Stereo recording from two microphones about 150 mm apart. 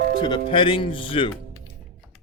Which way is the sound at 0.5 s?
35° left (ahead or behind).